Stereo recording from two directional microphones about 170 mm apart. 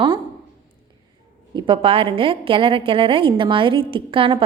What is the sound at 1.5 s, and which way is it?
A woman's voice, 30° right (ahead or behind).